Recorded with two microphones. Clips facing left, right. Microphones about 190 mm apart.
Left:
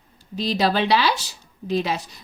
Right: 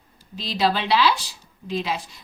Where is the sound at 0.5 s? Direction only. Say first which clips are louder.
Left 1 dB; 45° left (ahead or behind).